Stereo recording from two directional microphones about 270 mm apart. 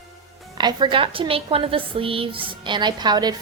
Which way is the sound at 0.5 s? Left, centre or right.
Centre.